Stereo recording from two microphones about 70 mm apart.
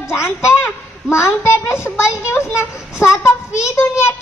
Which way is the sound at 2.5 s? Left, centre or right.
Left.